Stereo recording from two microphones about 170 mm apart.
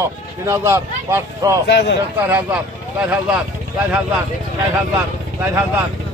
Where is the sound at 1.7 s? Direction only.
90° left.